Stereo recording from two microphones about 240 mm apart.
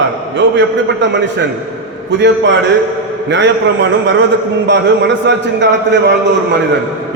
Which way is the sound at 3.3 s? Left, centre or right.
Right.